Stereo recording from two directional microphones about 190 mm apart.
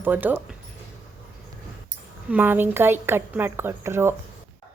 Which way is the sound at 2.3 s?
10° right (ahead or behind).